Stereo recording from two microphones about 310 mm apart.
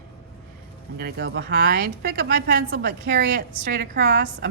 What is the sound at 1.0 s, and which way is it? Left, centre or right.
A woman's voice, right.